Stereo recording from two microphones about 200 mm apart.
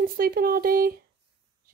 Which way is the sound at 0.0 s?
45° right (ahead or behind).